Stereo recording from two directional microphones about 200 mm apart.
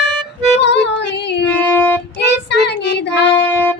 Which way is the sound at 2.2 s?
60° left (ahead or behind).